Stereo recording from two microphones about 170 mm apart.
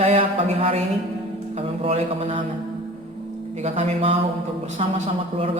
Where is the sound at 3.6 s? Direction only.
40° right (ahead or behind).